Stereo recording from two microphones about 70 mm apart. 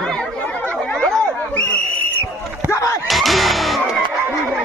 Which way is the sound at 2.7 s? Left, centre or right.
Left.